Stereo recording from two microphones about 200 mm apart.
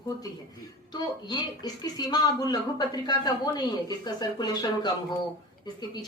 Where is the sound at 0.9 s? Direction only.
20° left (ahead or behind).